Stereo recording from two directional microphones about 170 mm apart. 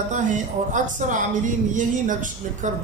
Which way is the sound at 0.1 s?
45° right (ahead or behind).